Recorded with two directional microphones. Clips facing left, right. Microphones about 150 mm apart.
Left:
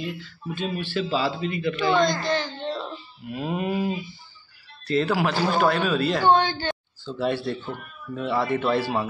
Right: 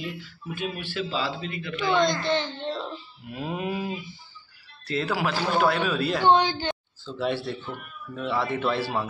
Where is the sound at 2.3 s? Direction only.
25° right (ahead or behind).